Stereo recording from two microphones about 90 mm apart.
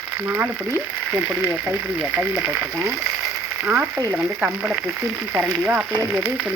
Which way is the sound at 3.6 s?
15° right (ahead or behind).